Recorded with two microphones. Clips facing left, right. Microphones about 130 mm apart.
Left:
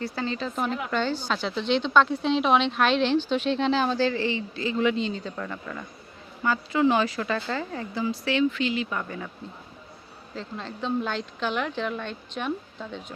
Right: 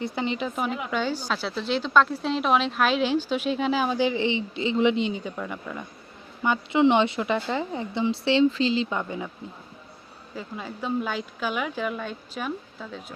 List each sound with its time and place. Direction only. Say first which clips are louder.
0.0 s speech: right 2 dB; 20° right (ahead or behind)
6.4 s speech: right 2 dB; 20° right (ahead or behind)
10.3 s speech: even; 10° right (ahead or behind)